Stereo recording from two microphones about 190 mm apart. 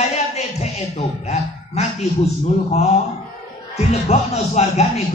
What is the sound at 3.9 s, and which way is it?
Speech, 35° left (ahead or behind).